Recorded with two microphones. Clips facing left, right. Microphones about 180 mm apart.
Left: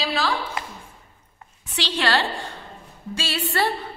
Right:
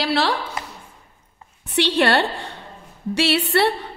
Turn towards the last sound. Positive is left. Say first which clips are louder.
# right 6 dB
turn(degrees=-70)  # may be behind; listen again after turning